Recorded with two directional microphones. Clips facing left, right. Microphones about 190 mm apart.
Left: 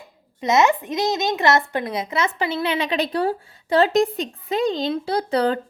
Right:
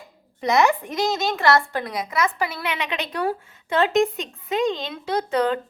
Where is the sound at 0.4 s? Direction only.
20° left (ahead or behind).